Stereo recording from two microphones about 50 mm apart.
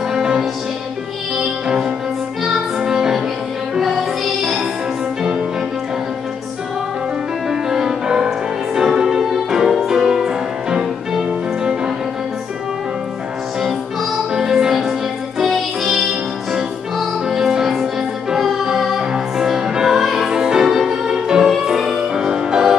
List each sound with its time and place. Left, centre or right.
0.1 s music: centre
2.4 s music: centre
7.4 s music: centre
14.3 s music: centre
17.3 s music: centre